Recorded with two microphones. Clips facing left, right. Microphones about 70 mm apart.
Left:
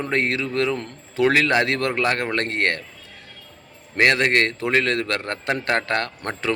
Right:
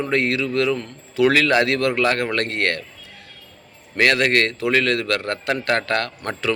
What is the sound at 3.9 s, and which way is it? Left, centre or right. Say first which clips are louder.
Speech: even; left.